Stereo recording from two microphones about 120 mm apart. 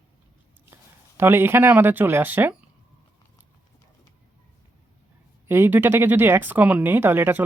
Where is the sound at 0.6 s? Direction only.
20° right (ahead or behind).